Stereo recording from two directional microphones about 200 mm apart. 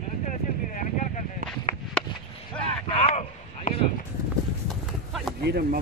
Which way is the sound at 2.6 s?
30° left (ahead or behind).